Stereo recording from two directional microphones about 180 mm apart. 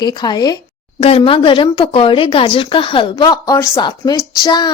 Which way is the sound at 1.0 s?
35° left (ahead or behind).